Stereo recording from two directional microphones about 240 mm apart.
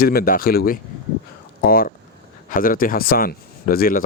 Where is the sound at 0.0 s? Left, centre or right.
Left.